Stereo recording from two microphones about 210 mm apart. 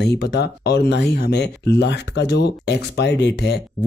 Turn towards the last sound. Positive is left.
turn(degrees=55)  # may be behind; listen again after turning